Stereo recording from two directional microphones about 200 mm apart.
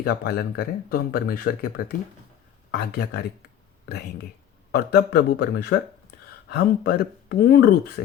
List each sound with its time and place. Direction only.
0.0 s speech: 50° left (ahead or behind)
4.7 s speech: 55° left (ahead or behind)